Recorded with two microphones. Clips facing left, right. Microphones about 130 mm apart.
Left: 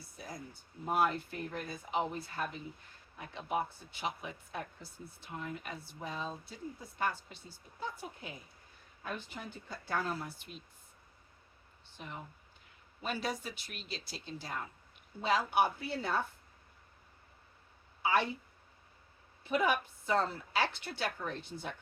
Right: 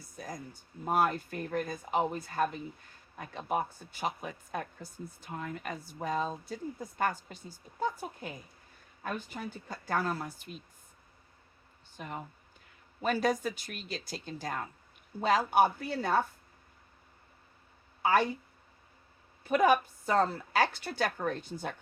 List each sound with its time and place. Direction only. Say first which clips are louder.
0.9 s speech: right 3 dB; 40° right (ahead or behind)
11.9 s speech: right 5 dB; 50° right (ahead or behind)
18.0 s speech: right 4 dB; 45° right (ahead or behind)
19.5 s speech: right 6 dB; 45° right (ahead or behind)